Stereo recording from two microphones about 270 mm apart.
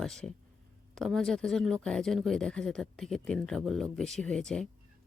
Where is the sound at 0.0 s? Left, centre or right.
Centre.